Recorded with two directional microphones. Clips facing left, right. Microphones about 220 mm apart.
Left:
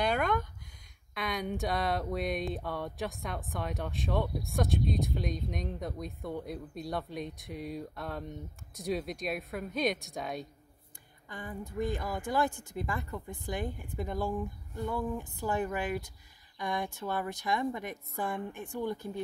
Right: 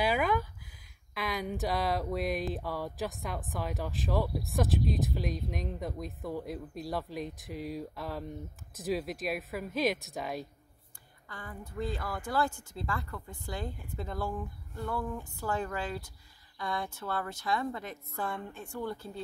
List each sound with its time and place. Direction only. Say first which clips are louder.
0.0 s a sound: right 1 dB; 5° right (ahead or behind)
1.1 s speech: even; centre (ahead or behind)
11.2 s speech: left 4 dB; 20° left (ahead or behind)